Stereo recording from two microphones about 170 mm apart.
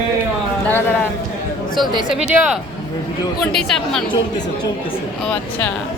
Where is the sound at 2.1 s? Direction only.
5° right (ahead or behind).